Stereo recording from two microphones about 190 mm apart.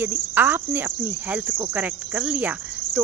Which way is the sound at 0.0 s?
10° right (ahead or behind).